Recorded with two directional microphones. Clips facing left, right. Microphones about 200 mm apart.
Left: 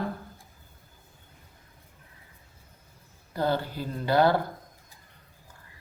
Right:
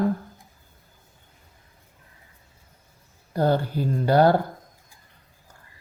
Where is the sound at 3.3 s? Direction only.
45° right (ahead or behind).